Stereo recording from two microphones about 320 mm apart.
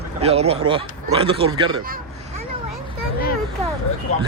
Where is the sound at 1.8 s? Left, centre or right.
Right.